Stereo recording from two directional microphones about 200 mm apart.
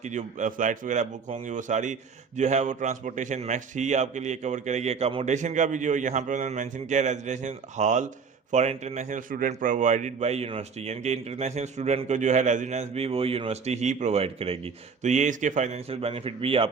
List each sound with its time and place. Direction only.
0.0 s a man's voice: 35° right (ahead or behind)